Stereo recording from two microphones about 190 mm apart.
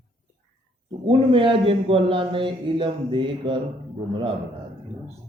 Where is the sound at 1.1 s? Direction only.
25° right (ahead or behind).